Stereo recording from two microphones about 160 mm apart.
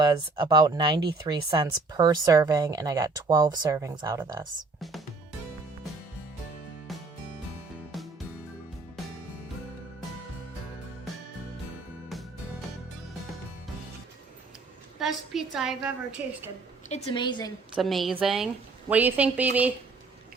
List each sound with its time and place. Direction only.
0.0 s speech: 25° right (ahead or behind)
4.8 s music: centre (ahead or behind)
7.9 s music: centre (ahead or behind)
14.9 s a woman's voice: centre (ahead or behind)
16.9 s a woman's voice: 30° left (ahead or behind)
17.7 s a woman's voice: centre (ahead or behind)